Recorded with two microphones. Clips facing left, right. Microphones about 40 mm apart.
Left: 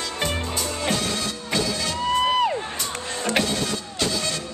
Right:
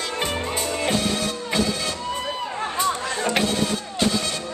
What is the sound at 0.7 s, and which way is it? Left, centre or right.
Music, right.